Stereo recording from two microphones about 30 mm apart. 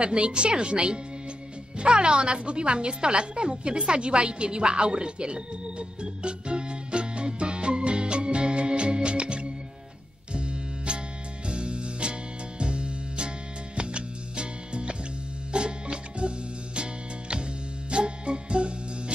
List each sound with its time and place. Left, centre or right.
0.0 s a woman's voice: right
10.3 s music: right